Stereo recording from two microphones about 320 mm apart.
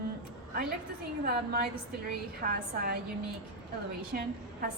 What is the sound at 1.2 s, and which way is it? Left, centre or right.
A woman's voice, right.